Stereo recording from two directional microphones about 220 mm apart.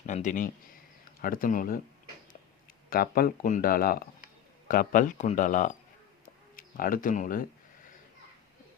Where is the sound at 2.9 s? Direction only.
40° left (ahead or behind).